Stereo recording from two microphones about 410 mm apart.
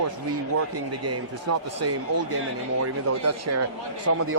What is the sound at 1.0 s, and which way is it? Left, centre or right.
A man's voice, right.